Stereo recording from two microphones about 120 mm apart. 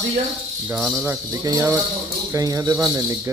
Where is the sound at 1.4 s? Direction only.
30° right (ahead or behind).